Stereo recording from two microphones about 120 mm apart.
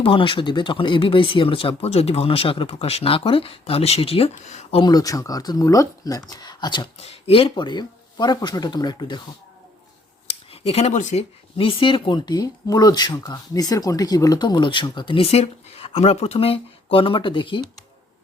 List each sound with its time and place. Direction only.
0.0 s speech: 45° left (ahead or behind); by 4.8 s 65° left (ahead or behind)
4.8 s speech: 35° left (ahead or behind)
7.0 s speech: 50° left (ahead or behind)
10.2 s speech: 55° left (ahead or behind)